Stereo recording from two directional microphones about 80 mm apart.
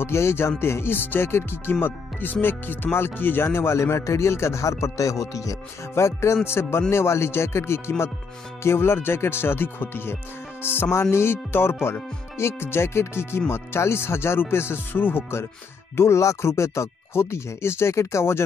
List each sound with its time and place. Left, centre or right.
0.0 s speech: left
16.0 s speech: left